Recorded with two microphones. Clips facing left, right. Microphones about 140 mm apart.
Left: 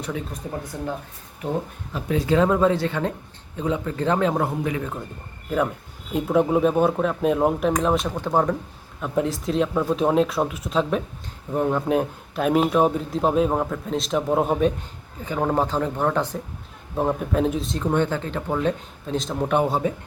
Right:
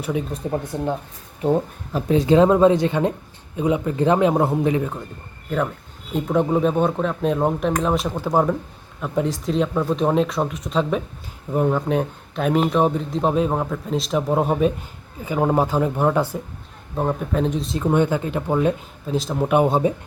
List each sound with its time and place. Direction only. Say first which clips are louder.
0.4 s speech: right 5 dB; 30° right (ahead or behind)
2.1 s speech: right 5 dB; 20° right (ahead or behind)
4.4 s speech: right 6 dB; 30° right (ahead or behind)
6.1 s speech: even; 5° left (ahead or behind)
16.9 s speech: even; centre (ahead or behind); by 18.7 s 15° right (ahead or behind)
19.0 s speech: right 3 dB; 5° right (ahead or behind)
19.6 s speech: right 4 dB; 20° right (ahead or behind)